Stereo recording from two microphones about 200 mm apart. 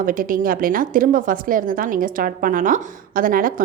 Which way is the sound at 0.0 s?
45° right (ahead or behind).